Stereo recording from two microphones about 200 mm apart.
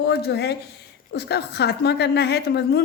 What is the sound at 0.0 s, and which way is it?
A woman's voice, 55° left (ahead or behind).